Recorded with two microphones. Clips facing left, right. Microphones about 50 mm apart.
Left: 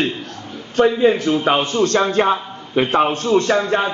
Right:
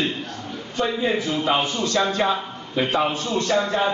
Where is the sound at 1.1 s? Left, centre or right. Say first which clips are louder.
Left 5 dB; left.